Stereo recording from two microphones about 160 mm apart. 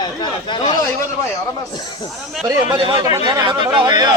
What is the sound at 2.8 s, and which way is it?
Speech, 25° right (ahead or behind).